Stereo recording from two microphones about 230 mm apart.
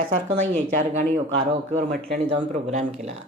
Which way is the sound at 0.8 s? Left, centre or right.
Right.